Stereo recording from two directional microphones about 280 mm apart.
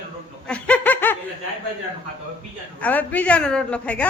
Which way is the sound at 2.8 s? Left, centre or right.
Centre.